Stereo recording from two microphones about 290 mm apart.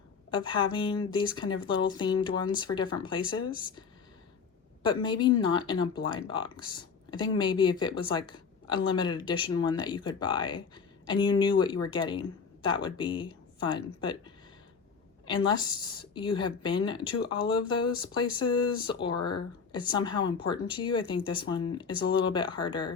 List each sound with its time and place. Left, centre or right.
0.3 s speech: centre
4.8 s speech: centre
15.6 s speech: centre